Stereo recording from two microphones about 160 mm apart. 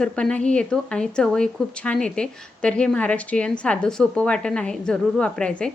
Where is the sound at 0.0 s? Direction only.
5° left (ahead or behind).